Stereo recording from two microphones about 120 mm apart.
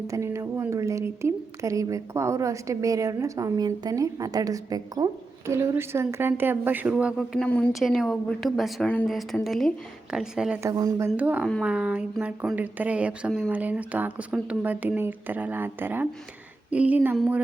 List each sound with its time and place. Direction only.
0.1 s a woman's voice: 25° right (ahead or behind)
7.2 s a woman's voice: 5° left (ahead or behind)
10.6 s a woman's voice: 30° right (ahead or behind)
11.2 s speech: 15° right (ahead or behind)